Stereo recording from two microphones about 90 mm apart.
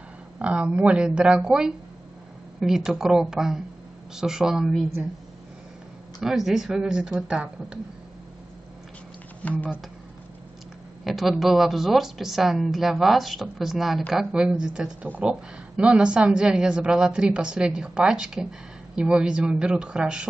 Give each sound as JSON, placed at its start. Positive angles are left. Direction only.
{"t": 0.4, "sound": "a woman's voice", "side_deg": -10}
{"t": 6.2, "sound": "a woman's voice", "side_deg": -5}
{"t": 9.4, "sound": "speech", "side_deg": 15}
{"t": 11.1, "sound": "a woman's voice", "side_deg": 0}